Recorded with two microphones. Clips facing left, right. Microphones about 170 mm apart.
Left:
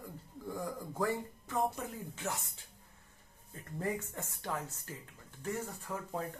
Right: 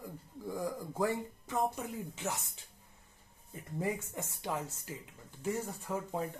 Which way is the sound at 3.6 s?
15° right (ahead or behind).